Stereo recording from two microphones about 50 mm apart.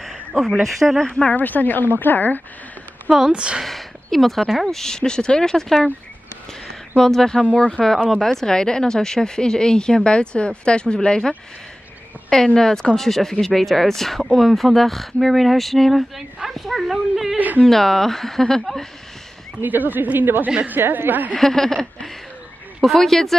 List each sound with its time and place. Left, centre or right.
0.0 s speech: centre
1.3 s speech: left
3.3 s speech: centre
3.6 s speech: centre
7.0 s speech: centre
7.5 s speech: left
8.1 s speech: centre
12.4 s speech: centre
17.6 s speech: centre
19.6 s speech: right
20.4 s speech: right
20.7 s speech: right
21.4 s speech: centre
22.8 s speech: centre